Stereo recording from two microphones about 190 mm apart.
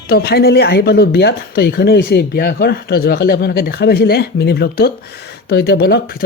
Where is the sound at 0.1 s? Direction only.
55° left (ahead or behind).